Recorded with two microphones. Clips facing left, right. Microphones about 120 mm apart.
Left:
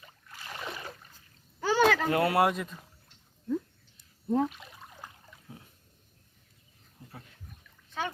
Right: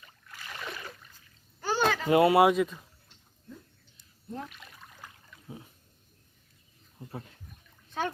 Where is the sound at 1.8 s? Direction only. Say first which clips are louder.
Left 4 dB; 90° left.